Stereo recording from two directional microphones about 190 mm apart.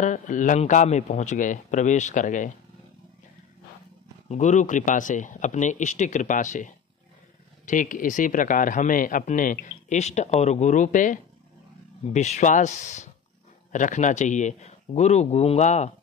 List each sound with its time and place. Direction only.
0.0 s a man's voice: 40° left (ahead or behind)
4.3 s a man's voice: 40° left (ahead or behind)